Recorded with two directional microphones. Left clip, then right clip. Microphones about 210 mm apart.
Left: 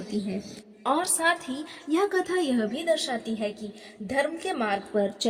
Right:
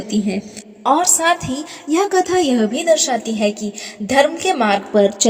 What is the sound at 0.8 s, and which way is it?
A woman's voice, 30° right (ahead or behind).